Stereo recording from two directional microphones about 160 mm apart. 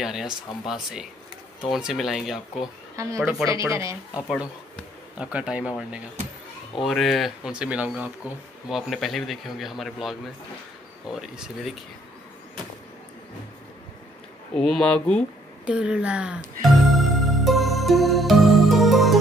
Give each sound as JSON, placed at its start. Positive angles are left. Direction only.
{"t": 0.0, "sound": "speech", "side_deg": 0}
{"t": 3.0, "sound": "speech", "side_deg": -20}
{"t": 5.2, "sound": "speech", "side_deg": -5}
{"t": 14.5, "sound": "speech", "side_deg": 5}
{"t": 15.6, "sound": "music", "side_deg": -5}